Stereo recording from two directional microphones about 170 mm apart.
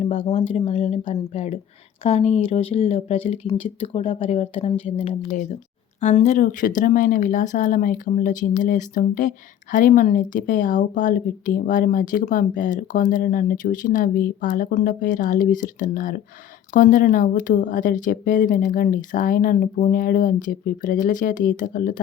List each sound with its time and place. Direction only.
0.0 s speech: 35° left (ahead or behind); by 21.9 s 50° left (ahead or behind)